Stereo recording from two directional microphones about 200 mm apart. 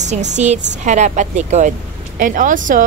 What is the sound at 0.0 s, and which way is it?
Speech, 35° right (ahead or behind).